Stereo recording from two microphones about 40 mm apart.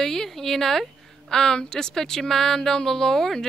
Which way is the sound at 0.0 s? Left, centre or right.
Centre.